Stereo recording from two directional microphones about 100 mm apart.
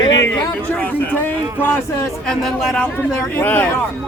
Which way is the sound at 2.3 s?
5° left (ahead or behind).